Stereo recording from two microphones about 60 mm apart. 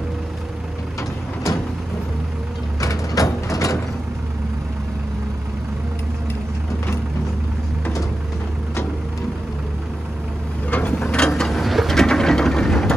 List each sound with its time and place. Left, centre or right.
2.8 s sliding door: left
10.7 s gears: left
11.0 s a sound: centre